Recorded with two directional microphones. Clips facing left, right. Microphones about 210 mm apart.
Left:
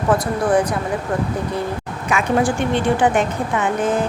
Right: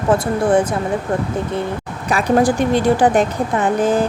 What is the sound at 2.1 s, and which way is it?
Speech, 35° right (ahead or behind).